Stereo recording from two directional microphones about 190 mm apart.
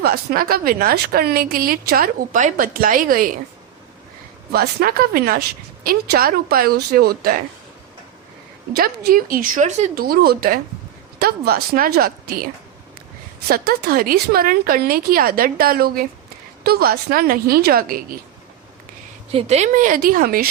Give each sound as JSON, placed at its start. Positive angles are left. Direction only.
{"t": 0.0, "sound": "a woman's voice", "side_deg": -55}
{"t": 4.5, "sound": "a woman's voice", "side_deg": -55}
{"t": 8.7, "sound": "a woman's voice", "side_deg": -50}
{"t": 10.0, "sound": "a woman's voice", "side_deg": -50}
{"t": 13.5, "sound": "a woman's voice", "side_deg": -50}
{"t": 19.3, "sound": "a woman's voice", "side_deg": -30}